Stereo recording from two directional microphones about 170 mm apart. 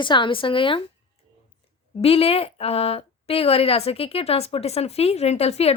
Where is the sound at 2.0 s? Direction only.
35° left (ahead or behind).